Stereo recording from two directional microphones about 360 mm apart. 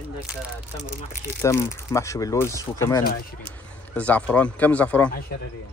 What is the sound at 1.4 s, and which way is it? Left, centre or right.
Speech, centre.